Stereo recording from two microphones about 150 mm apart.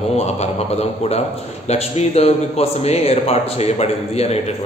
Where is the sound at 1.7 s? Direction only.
45° left (ahead or behind).